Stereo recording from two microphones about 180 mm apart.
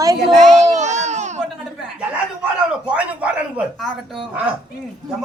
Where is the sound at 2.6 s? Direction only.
5° right (ahead or behind).